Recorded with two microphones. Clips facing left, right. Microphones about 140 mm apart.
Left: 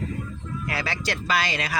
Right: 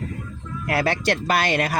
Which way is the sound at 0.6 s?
55° right (ahead or behind).